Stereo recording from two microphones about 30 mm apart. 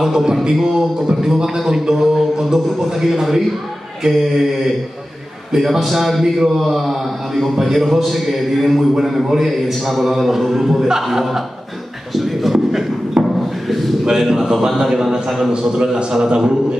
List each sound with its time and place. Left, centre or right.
0.0 s mantra: centre
1.0 s a man's voice: centre
1.9 s mantra: centre
4.0 s a man's voice: centre
9.0 s mantra: centre
9.5 s a man's voice: centre
13.4 s a sound: centre
14.0 s mantra: centre
15.2 s a man's voice: centre
15.5 s a man's voice: right